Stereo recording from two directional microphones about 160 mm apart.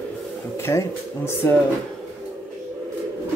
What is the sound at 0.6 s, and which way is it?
Speech, 15° left (ahead or behind).